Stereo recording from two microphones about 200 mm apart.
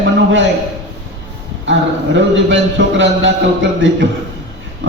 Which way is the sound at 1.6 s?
65° right (ahead or behind).